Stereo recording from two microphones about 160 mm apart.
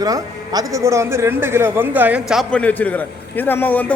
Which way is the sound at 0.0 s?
25° right (ahead or behind).